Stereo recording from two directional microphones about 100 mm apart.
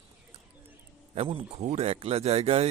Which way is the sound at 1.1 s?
75° right (ahead or behind).